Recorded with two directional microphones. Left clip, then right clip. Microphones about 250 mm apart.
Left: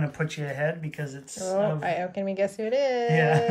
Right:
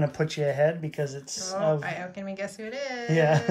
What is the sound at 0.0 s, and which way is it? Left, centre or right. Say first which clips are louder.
Speech: right 5 dB; right.